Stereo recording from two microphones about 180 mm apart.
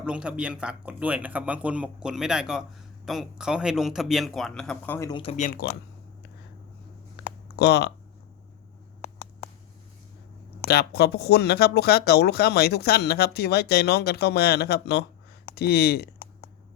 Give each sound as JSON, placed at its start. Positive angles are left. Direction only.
{"t": 0.0, "sound": "a man's voice", "side_deg": -5}
{"t": 4.9, "sound": "speech", "side_deg": 20}
{"t": 5.2, "sound": "speech", "side_deg": 35}
{"t": 7.2, "sound": "a sound", "side_deg": 65}
{"t": 7.5, "sound": "speech", "side_deg": 65}
{"t": 10.7, "sound": "speech", "side_deg": 60}